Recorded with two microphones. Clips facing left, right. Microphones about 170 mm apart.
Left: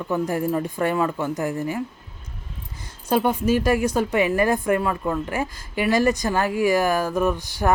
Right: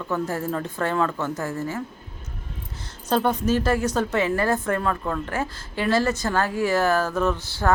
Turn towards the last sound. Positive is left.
turn(degrees=15)  # may be behind; listen again after turning